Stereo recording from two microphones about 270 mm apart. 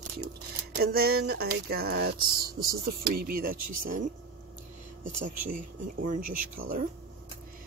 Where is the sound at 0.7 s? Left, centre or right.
Right.